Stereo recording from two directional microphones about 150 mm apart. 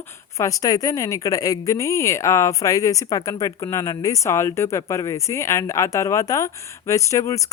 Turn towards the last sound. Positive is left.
turn(degrees=20)  # may be behind; listen again after turning